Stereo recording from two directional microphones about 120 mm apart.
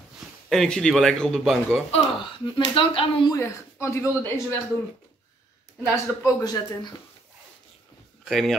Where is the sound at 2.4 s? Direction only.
45° left (ahead or behind).